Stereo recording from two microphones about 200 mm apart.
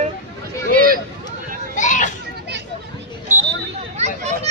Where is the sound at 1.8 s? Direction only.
40° left (ahead or behind).